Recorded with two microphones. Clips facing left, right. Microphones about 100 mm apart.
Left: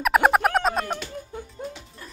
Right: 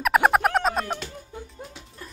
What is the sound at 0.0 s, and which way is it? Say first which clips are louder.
Music: left 1 dB; centre (ahead or behind).